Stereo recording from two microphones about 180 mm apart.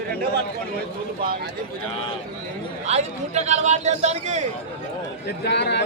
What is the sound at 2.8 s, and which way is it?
A man's voice, 40° right (ahead or behind).